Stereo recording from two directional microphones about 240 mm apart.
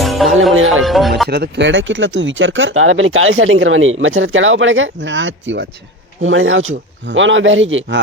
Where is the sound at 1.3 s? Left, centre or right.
Right.